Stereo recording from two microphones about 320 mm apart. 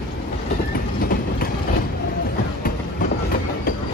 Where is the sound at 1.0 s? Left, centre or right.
Left.